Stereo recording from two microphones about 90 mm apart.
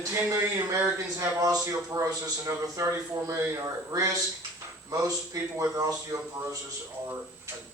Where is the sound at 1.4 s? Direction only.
45° right (ahead or behind).